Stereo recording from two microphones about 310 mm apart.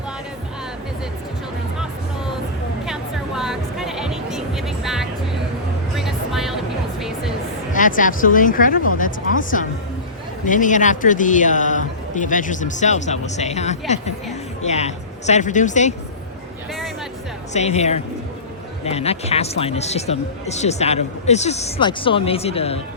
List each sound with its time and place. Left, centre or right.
2.8 s music: centre
7.7 s speech: left
17.5 s speech: left